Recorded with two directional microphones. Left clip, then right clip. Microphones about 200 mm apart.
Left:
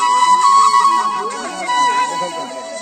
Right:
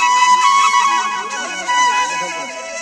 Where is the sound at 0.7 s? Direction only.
40° right (ahead or behind).